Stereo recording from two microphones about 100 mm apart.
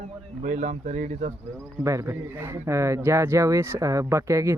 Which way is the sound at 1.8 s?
30° right (ahead or behind).